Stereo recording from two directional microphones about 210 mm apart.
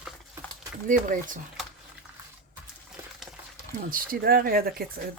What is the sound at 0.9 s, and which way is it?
Speech, 40° right (ahead or behind).